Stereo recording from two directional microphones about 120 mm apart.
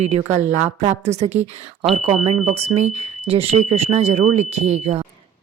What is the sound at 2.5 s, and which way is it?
Speech, 60° right (ahead or behind).